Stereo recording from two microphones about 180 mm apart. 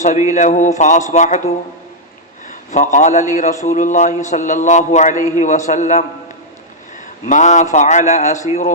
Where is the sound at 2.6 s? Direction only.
40° left (ahead or behind).